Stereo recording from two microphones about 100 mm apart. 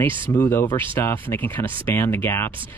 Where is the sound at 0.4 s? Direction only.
20° left (ahead or behind).